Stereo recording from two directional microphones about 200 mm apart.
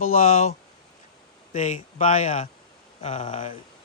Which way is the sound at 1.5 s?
40° left (ahead or behind).